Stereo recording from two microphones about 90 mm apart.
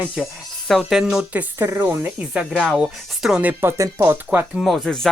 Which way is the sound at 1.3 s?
20° right (ahead or behind).